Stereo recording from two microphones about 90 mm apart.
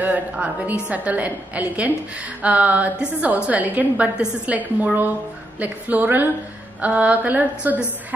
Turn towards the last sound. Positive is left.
turn(degrees=-20)  # may be behind; listen again after turning